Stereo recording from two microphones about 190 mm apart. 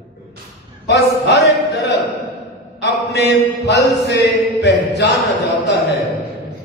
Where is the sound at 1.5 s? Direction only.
60° left (ahead or behind).